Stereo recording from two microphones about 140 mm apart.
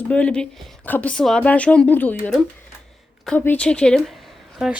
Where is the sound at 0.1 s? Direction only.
10° left (ahead or behind).